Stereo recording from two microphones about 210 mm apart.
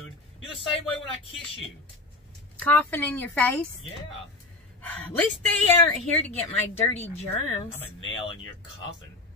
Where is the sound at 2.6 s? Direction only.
10° left (ahead or behind).